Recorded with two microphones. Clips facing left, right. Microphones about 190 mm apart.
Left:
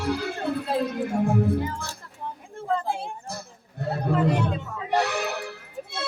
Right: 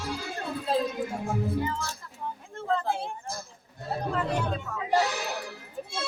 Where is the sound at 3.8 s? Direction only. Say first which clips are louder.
Left 7 dB; 65° left (ahead or behind).